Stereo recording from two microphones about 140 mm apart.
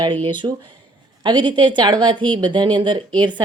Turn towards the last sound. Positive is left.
turn(degrees=-35)  # may be behind; listen again after turning